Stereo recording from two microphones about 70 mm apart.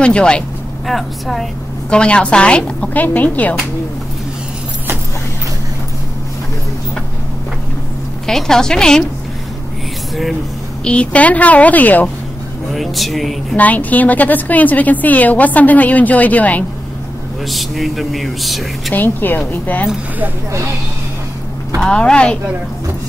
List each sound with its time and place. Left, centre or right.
0.0 s a woman's voice: centre
0.8 s speech: centre
1.9 s a woman's voice: centre
8.3 s a woman's voice: centre
10.8 s a woman's voice: centre
12.7 s speech: centre
13.6 s a woman's voice: left
17.5 s speech: centre
18.9 s a woman's voice: left
21.8 s a woman's voice: centre